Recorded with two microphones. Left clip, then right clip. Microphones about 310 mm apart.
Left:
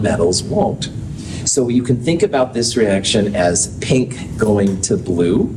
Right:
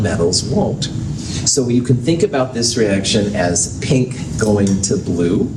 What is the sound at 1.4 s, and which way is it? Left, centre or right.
Speech, left.